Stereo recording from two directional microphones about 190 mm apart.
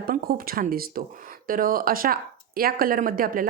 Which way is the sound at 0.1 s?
50° right (ahead or behind).